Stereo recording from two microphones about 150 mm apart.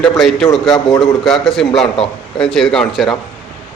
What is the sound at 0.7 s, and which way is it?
Speech, 30° left (ahead or behind).